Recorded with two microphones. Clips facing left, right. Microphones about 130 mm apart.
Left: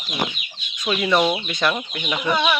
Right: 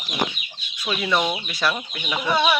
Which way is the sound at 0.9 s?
Centre (ahead or behind).